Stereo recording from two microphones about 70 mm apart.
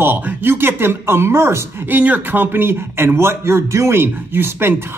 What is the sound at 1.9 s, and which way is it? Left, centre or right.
Speech, right.